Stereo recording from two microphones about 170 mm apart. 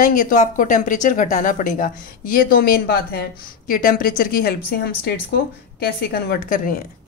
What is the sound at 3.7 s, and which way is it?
A woman's voice, 55° left (ahead or behind).